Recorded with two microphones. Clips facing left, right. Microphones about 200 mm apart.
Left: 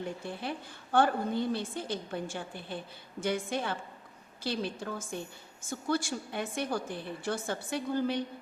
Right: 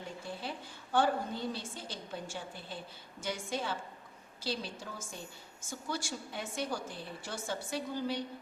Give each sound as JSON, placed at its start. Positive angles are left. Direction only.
{"t": 0.9, "sound": "a woman's voice", "side_deg": 60}